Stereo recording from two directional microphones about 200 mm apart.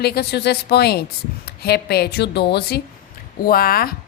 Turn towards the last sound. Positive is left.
turn(degrees=50)  # may be behind; listen again after turning